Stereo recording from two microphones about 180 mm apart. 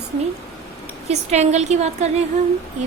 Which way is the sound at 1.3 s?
40° right (ahead or behind).